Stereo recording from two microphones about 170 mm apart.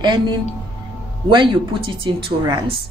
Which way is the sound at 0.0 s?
25° right (ahead or behind).